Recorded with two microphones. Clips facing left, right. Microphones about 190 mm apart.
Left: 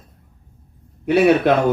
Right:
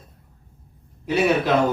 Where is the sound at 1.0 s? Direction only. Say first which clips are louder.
Left 6 dB; 60° left (ahead or behind).